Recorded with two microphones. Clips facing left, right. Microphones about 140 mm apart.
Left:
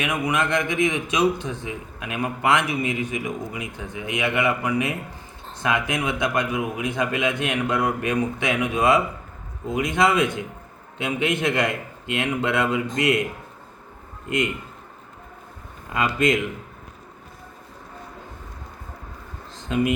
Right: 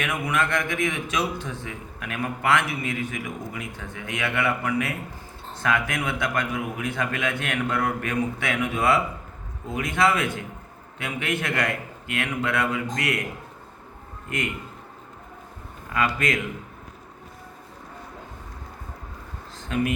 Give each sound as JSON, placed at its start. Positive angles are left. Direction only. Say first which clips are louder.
{"t": 0.0, "sound": "a man's voice", "louder": "left 2 dB", "side_deg": 15}
{"t": 15.9, "sound": "a man's voice", "louder": "left 4 dB", "side_deg": 20}
{"t": 19.6, "sound": "speech", "louder": "left 3 dB", "side_deg": 20}